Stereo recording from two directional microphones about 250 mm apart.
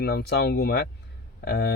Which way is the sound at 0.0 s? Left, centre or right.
Left.